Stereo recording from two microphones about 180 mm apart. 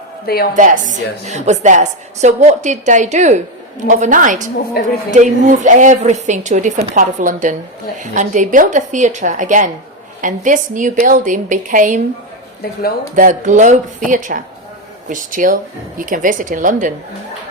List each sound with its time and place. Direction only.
0.5 s a woman's voice: 45° right (ahead or behind)
4.8 s speech: 60° left (ahead or behind)
5.1 s a woman's voice: 45° right (ahead or behind)
13.1 s a woman's voice: 45° right (ahead or behind)